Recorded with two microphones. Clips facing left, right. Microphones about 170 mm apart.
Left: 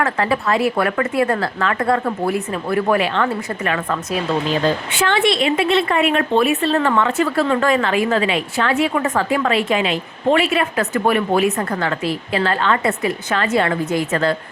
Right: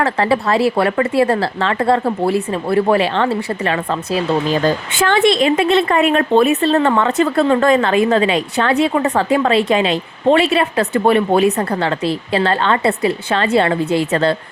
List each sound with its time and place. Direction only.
0.0 s a woman's voice: 35° right (ahead or behind)